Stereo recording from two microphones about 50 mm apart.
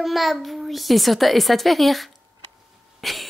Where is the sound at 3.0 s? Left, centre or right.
Centre.